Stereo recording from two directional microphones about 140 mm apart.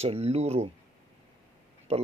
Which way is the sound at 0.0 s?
45° right (ahead or behind).